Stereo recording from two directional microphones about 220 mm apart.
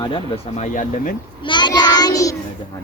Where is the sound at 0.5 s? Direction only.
35° left (ahead or behind).